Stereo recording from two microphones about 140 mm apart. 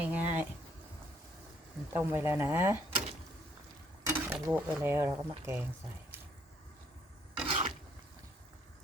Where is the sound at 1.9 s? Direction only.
15° right (ahead or behind).